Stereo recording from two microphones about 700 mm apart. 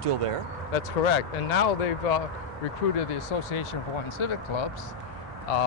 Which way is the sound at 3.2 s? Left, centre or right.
Left.